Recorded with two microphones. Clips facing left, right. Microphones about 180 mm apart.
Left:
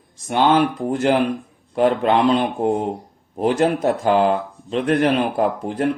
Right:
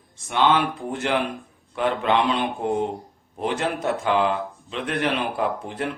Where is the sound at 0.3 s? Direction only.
45° left (ahead or behind).